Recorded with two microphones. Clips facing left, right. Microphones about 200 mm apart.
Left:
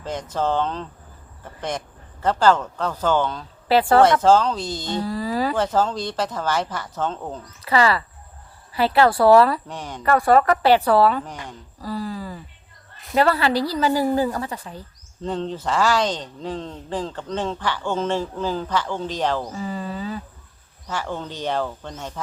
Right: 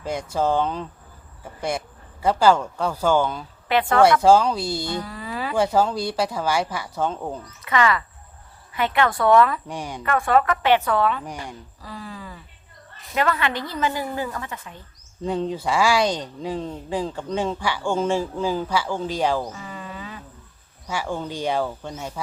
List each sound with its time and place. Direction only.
0.0 s speech: 10° right (ahead or behind)
2.2 s speech: 10° right (ahead or behind)
3.7 s speech: 35° left (ahead or behind)
4.0 s speech: 10° right (ahead or behind)
4.9 s a sound: 35° left (ahead or behind)
5.5 s speech: 10° right (ahead or behind)
7.6 s speech: 35° left (ahead or behind)
9.6 s speech: 10° right (ahead or behind)
10.0 s speech: 35° left (ahead or behind)
11.8 s a sound: 40° left (ahead or behind)
13.1 s speech: 35° left (ahead or behind)
15.2 s speech: 10° right (ahead or behind)
19.5 s insect: 35° left (ahead or behind)
20.8 s speech: 10° right (ahead or behind)